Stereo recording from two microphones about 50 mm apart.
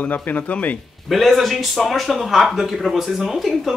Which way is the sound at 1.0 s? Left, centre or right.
Centre.